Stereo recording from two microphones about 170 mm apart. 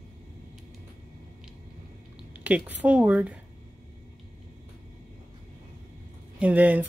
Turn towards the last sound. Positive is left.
turn(degrees=-10)  # may be behind; listen again after turning